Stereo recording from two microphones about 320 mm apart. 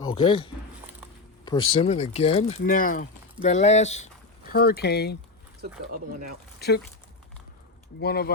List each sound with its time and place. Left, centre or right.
0.1 s speech: centre
1.7 s speech: centre
5.9 s speech: right
6.6 s speech: left
8.0 s speech: left